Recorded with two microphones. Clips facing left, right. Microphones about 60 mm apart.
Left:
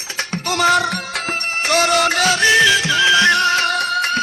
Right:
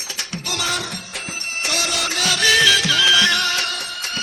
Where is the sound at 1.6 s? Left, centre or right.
Left.